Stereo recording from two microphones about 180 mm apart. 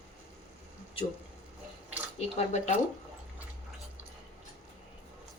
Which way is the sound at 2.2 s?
35° left (ahead or behind).